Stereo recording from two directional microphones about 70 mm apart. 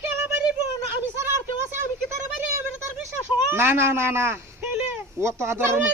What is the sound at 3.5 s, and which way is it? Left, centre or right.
A man's voice, right.